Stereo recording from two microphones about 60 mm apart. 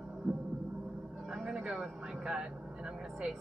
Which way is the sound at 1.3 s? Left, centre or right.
Centre.